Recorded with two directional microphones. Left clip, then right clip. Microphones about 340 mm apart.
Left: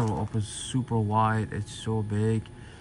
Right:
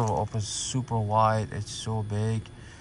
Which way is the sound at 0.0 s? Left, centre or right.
Centre.